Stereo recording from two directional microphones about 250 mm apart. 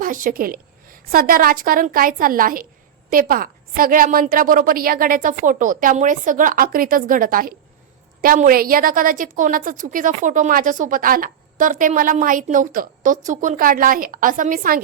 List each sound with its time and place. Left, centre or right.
0.0 s a woman's voice: right